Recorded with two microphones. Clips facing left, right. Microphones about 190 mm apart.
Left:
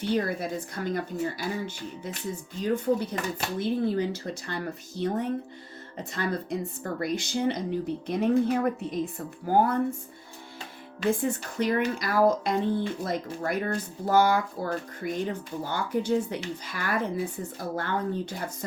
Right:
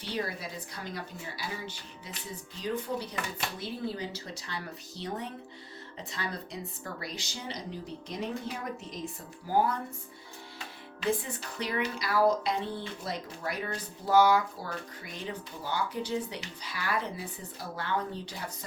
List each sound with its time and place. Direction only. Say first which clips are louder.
0.0 s speech: left 8 dB; 50° left (ahead or behind)
11.0 s speech: left 5 dB; 45° left (ahead or behind)